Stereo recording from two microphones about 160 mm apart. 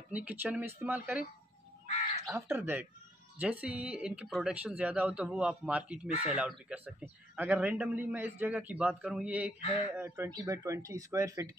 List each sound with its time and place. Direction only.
0.1 s a man's voice: 10° right (ahead or behind)
2.3 s a man's voice: 15° right (ahead or behind)
9.6 s speech: 40° left (ahead or behind)
9.9 s speech: 15° right (ahead or behind)